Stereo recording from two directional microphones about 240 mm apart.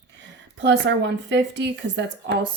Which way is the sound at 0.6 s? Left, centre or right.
Right.